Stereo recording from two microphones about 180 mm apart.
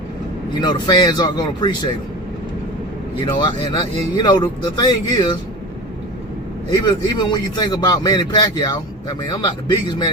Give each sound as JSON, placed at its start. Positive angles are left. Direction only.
{"t": 0.6, "sound": "a man's voice", "side_deg": 25}
{"t": 3.4, "sound": "a man's voice", "side_deg": 25}
{"t": 6.7, "sound": "a man's voice", "side_deg": 25}